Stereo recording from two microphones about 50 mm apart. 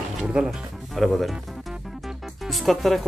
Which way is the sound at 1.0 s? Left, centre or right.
Centre.